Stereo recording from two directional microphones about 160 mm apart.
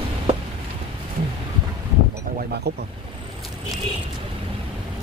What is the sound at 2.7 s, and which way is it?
Speech, 90° right.